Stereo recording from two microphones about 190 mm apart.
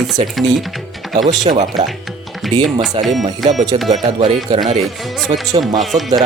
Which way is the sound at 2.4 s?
Centre (ahead or behind).